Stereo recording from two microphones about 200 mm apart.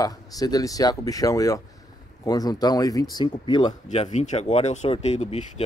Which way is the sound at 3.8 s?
35° left (ahead or behind).